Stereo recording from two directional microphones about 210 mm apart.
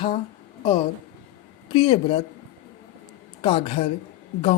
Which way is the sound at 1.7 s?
20° left (ahead or behind).